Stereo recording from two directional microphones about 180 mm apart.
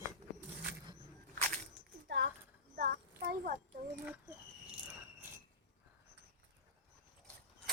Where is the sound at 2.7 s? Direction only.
60° right (ahead or behind).